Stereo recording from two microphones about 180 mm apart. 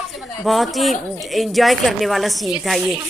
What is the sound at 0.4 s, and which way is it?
A woman's voice, centre (ahead or behind).